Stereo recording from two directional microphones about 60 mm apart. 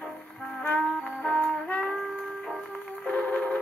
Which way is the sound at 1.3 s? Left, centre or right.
Left.